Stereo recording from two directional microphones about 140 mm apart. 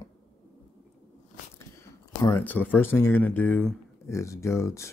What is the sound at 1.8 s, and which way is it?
Speech, 20° left (ahead or behind).